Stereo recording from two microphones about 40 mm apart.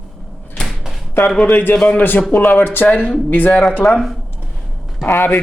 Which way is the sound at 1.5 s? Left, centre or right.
Left.